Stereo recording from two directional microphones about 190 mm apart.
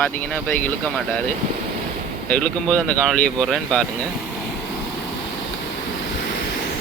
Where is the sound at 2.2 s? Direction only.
5° left (ahead or behind).